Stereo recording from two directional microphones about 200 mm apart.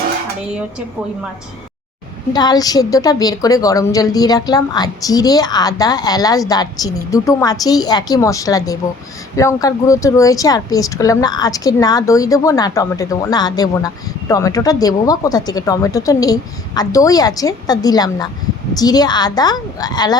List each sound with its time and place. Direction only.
2.3 s a woman's voice: 20° left (ahead or behind)